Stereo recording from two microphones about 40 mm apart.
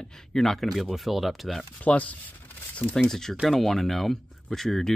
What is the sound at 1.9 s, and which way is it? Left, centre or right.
Speech, left.